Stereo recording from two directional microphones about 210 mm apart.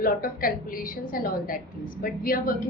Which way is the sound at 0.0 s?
45° left (ahead or behind).